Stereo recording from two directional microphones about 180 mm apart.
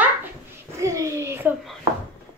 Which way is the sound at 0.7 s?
15° right (ahead or behind).